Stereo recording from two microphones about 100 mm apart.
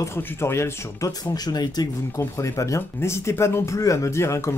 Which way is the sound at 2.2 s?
30° left (ahead or behind).